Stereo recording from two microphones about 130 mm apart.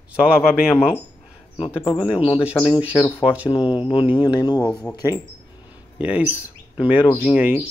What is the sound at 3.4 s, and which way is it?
Speech, 40° left (ahead or behind).